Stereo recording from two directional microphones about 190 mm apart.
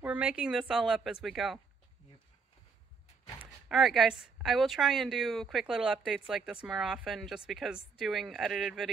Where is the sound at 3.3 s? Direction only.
Centre (ahead or behind).